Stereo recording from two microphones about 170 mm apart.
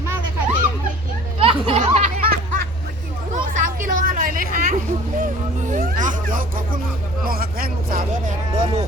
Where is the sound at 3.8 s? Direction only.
55° right (ahead or behind).